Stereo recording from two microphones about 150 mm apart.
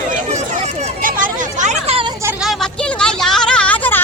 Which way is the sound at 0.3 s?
50° right (ahead or behind).